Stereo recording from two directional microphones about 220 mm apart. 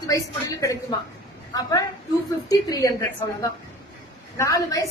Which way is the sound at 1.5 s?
15° left (ahead or behind).